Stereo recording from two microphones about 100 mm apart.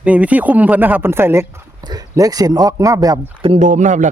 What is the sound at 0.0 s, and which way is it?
A man's voice, 15° right (ahead or behind).